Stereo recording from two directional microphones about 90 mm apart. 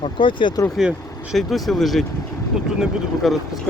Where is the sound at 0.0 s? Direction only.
70° left (ahead or behind).